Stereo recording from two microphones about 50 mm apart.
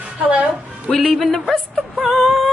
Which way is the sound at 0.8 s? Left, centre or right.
Centre.